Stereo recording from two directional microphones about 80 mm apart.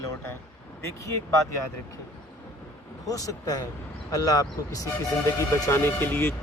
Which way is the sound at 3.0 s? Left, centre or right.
Left.